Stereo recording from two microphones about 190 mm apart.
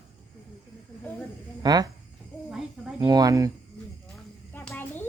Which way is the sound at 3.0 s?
20° right (ahead or behind).